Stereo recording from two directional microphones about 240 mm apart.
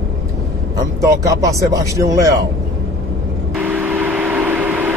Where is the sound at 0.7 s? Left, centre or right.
Centre.